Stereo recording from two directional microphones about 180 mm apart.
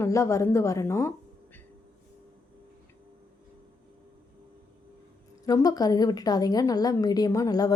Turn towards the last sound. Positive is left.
turn(degrees=20)  # may be behind; listen again after turning